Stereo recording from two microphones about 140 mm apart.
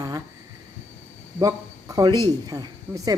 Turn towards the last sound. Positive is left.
turn(degrees=-25)  # may be behind; listen again after turning